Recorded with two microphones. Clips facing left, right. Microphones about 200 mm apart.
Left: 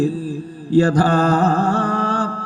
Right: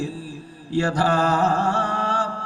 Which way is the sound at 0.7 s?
35° left (ahead or behind).